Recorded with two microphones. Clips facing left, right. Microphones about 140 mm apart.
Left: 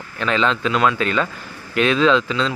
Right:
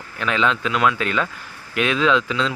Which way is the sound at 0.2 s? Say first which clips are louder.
Left 2 dB; 5° right (ahead or behind).